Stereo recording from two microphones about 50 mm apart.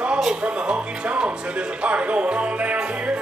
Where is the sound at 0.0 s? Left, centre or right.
Centre.